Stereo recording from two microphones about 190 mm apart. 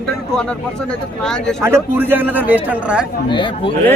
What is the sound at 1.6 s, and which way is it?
A man's voice, 10° right (ahead or behind).